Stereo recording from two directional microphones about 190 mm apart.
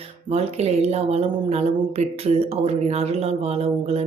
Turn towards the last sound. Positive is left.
turn(degrees=-30)  # may be behind; listen again after turning